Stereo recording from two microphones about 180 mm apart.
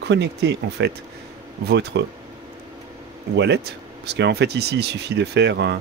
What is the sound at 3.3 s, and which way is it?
Speech, 75° right (ahead or behind).